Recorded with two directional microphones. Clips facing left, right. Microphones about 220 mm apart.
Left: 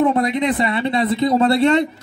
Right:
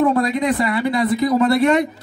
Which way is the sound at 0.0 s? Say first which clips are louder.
Even; 25° left (ahead or behind).